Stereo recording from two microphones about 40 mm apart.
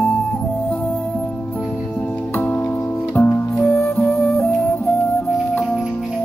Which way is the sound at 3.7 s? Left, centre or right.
Left.